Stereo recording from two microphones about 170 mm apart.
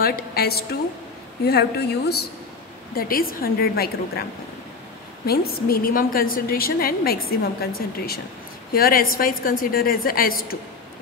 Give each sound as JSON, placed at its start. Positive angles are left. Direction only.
{"t": 0.0, "sound": "a woman's voice", "side_deg": 65}
{"t": 2.9, "sound": "a woman's voice", "side_deg": 60}
{"t": 5.2, "sound": "a woman's voice", "side_deg": 65}
{"t": 8.7, "sound": "a woman's voice", "side_deg": 60}